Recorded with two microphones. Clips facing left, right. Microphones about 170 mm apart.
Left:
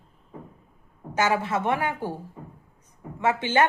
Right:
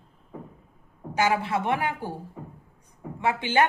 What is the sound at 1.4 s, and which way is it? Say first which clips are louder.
Speech: left 1 dB; 15° right (ahead or behind).